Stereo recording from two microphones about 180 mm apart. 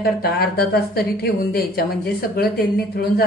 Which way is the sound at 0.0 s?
60° left (ahead or behind).